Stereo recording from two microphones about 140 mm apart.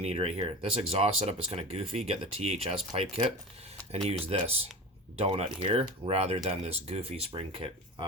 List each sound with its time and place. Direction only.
0.0 s speech: 45° right (ahead or behind)
4.3 s speech: 45° right (ahead or behind)